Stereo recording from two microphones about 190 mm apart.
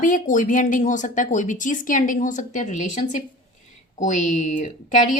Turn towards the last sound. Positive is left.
turn(degrees=40)  # may be behind; listen again after turning